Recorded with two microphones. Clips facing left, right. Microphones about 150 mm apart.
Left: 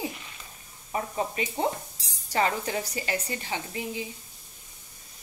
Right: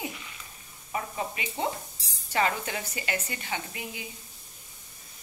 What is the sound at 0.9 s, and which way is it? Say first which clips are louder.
A woman's voice: left 4 dB; 35° left (ahead or behind).